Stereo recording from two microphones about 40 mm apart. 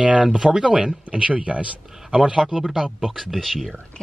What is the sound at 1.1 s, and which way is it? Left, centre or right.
Speech, right.